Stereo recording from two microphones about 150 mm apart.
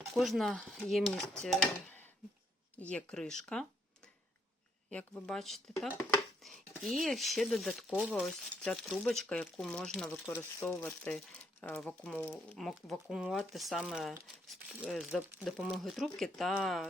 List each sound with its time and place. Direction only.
0.1 s speech: centre (ahead or behind)
2.7 s speech: 10° left (ahead or behind)
10.2 s speech: 15° left (ahead or behind)
11.0 s speech: 5° left (ahead or behind)